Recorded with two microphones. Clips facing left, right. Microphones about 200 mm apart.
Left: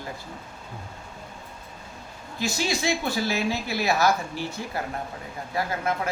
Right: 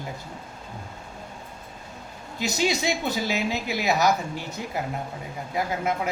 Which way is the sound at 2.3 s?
20° right (ahead or behind).